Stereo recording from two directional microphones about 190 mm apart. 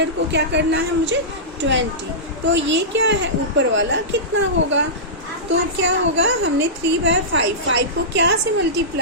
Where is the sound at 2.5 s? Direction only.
75° right (ahead or behind).